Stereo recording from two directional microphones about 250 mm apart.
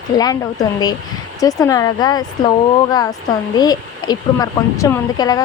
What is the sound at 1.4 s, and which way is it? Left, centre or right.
Speech, centre.